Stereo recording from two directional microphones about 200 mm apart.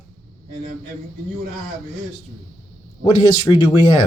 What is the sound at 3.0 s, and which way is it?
Speech, 25° left (ahead or behind).